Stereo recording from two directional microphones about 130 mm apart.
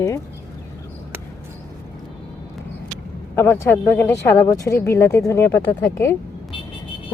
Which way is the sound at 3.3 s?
15° left (ahead or behind).